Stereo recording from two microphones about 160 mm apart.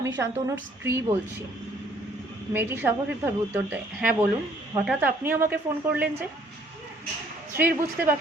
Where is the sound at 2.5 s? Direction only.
10° right (ahead or behind).